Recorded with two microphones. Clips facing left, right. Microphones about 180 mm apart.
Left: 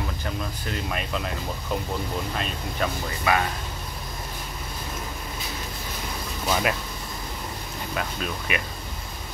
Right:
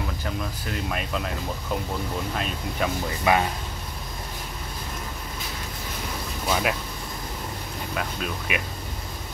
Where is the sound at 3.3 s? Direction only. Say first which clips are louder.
Right 2 dB; 20° right (ahead or behind).